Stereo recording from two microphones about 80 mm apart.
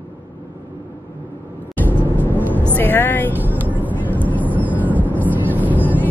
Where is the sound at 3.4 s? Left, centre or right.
Right.